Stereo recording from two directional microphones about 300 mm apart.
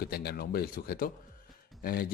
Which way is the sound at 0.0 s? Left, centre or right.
Left.